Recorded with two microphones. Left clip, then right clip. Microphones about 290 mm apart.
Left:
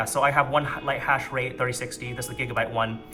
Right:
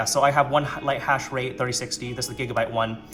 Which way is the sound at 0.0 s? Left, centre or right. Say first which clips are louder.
Right 2 dB; centre.